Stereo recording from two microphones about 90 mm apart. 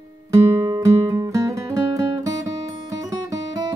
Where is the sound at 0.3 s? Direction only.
35° right (ahead or behind).